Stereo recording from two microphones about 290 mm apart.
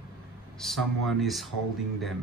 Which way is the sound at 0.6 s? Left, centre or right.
Centre.